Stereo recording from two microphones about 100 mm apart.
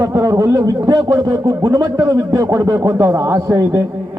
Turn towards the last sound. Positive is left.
turn(degrees=-25)  # may be behind; listen again after turning